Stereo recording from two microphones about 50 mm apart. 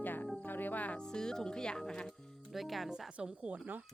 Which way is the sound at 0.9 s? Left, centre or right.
Centre.